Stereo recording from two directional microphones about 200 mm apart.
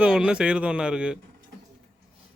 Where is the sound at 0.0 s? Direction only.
5° right (ahead or behind).